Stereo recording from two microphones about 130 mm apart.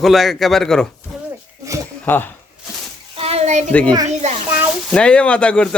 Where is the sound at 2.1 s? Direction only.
15° left (ahead or behind).